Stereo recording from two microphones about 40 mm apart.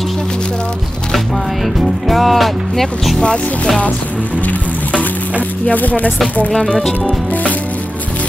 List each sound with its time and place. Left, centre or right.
1.8 s music: centre
3.2 s speech: centre
5.7 s speech: left